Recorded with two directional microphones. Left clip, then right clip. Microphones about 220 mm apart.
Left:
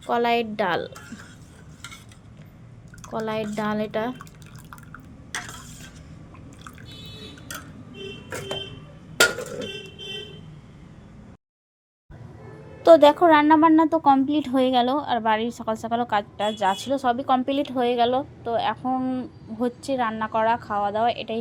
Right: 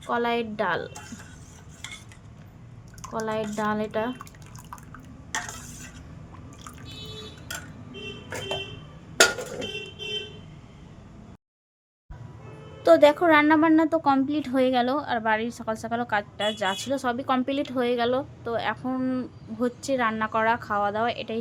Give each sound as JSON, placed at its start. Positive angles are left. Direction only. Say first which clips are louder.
{"t": 0.1, "sound": "speech", "louder": "left 4 dB", "side_deg": 15}
{"t": 3.1, "sound": "speech", "louder": "left 1 dB", "side_deg": 15}
{"t": 12.8, "sound": "a woman's voice", "louder": "left 4 dB", "side_deg": 5}